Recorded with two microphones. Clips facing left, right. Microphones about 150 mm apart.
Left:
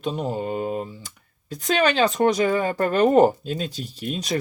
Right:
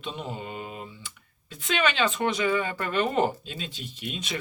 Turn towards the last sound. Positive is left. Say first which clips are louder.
# left 7 dB
turn(degrees=40)  # may be behind; listen again after turning